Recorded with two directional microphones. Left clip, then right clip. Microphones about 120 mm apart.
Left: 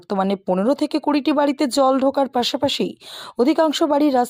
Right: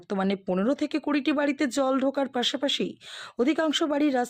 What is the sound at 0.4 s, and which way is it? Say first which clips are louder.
Speech: left 7 dB; 20° left (ahead or behind).